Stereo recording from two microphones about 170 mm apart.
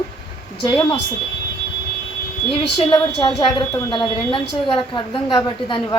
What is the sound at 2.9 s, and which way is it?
A woman's voice, 30° left (ahead or behind).